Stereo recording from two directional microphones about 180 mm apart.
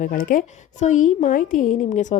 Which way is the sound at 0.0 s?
50° left (ahead or behind).